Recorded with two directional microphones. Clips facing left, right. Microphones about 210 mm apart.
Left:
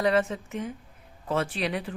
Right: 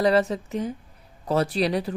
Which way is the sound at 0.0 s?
35° right (ahead or behind).